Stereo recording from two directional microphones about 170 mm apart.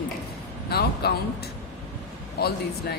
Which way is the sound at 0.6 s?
70° left (ahead or behind).